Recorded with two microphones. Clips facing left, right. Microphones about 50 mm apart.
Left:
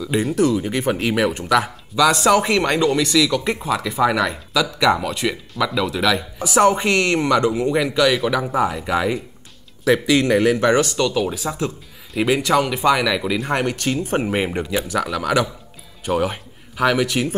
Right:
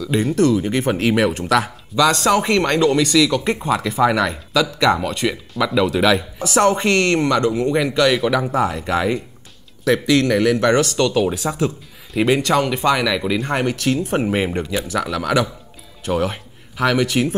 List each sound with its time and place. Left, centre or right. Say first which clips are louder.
0.1 s speech: right 2 dB; centre
7.7 s speech: right 2 dB; centre
10.2 s speech: even; centre
10.6 s speech: right 1 dB; centre